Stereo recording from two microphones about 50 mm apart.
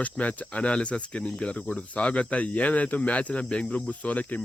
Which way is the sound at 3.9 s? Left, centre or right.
Left.